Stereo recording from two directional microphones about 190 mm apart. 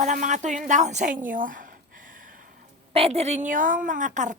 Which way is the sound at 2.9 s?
30° right (ahead or behind).